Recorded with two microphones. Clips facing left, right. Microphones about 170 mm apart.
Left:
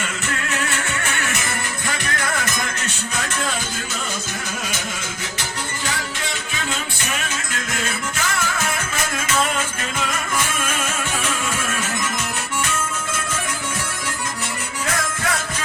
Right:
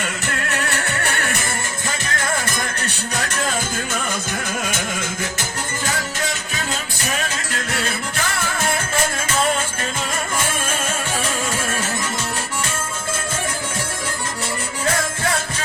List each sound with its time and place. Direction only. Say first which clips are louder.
0.7 s music: right 2 dB; 35° right (ahead or behind)
7.0 s music: right 2 dB; 40° right (ahead or behind)
10.3 s music: even; 30° right (ahead or behind)